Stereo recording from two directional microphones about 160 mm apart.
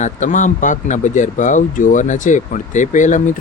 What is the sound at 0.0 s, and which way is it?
Speech, 50° left (ahead or behind).